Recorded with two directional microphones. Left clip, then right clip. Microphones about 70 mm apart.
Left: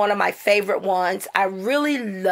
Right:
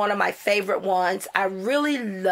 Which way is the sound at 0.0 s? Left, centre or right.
Left.